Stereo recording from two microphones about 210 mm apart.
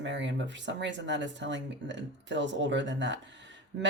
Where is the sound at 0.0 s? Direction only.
60° right (ahead or behind).